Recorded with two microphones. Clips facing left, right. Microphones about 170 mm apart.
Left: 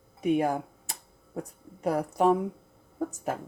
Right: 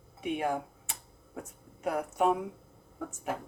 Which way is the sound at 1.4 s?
35° left (ahead or behind).